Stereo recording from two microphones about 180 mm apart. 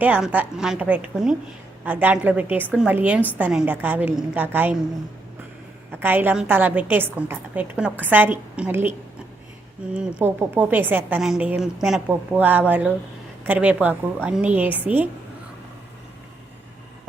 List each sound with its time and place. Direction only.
0.0 s a woman's voice: 10° right (ahead or behind)
6.0 s a woman's voice: 10° right (ahead or behind)